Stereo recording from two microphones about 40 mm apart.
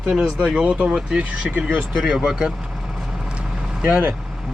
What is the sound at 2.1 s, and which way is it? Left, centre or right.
Speech, centre.